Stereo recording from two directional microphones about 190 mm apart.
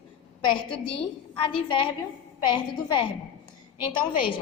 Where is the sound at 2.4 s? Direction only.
25° left (ahead or behind).